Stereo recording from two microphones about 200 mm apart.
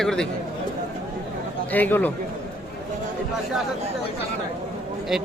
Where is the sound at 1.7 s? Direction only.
10° left (ahead or behind).